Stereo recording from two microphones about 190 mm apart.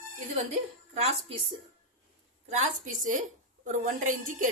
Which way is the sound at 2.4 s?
35° right (ahead or behind).